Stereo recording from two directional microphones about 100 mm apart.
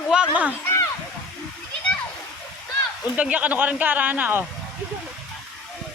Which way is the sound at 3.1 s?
15° right (ahead or behind).